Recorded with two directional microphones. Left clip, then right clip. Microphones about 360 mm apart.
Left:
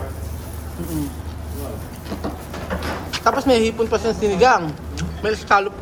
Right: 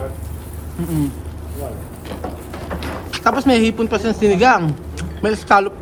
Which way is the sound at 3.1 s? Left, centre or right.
Right.